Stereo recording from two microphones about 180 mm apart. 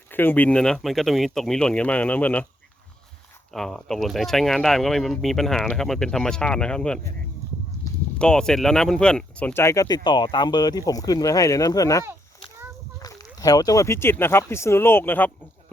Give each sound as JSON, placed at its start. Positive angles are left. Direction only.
{"t": 0.1, "sound": "speech", "side_deg": 10}
{"t": 3.5, "sound": "speech", "side_deg": 0}
{"t": 8.2, "sound": "speech", "side_deg": 5}